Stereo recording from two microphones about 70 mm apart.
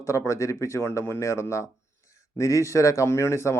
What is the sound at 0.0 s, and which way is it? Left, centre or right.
Speech, left.